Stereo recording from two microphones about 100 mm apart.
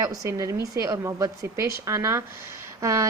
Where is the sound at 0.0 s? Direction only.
35° right (ahead or behind).